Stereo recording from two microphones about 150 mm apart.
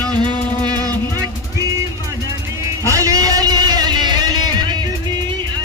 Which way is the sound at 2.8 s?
20° right (ahead or behind).